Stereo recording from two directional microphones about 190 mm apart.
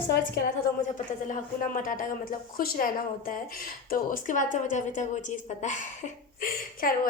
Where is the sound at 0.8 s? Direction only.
40° left (ahead or behind).